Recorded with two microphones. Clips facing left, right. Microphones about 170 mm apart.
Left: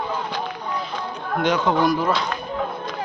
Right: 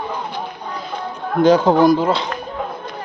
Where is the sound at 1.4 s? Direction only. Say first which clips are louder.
Right 8 dB; 35° right (ahead or behind).